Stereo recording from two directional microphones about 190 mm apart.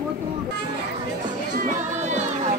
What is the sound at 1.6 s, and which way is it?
Music, 40° right (ahead or behind).